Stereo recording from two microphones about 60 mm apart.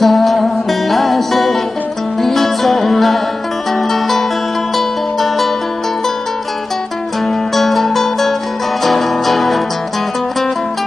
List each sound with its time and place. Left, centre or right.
0.0 s music: centre
7.5 s music: centre